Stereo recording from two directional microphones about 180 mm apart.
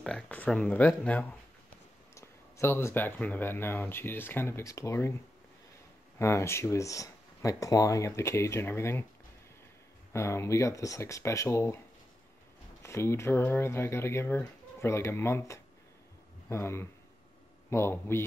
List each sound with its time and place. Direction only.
0.0 s speech: 5° left (ahead or behind)
6.1 s speech: 15° left (ahead or behind)
10.1 s speech: 15° left (ahead or behind)
12.8 s speech: 15° left (ahead or behind)